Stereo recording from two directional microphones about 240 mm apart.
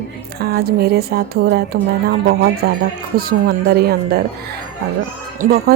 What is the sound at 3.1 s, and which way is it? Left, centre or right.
Speech, right.